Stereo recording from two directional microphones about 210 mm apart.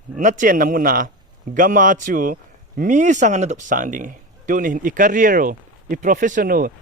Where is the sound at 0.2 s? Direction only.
35° right (ahead or behind).